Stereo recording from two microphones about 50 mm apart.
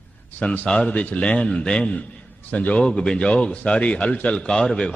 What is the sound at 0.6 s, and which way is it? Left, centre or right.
A man's voice, centre.